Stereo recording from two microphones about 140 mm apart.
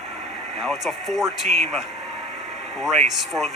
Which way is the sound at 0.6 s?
Centre (ahead or behind).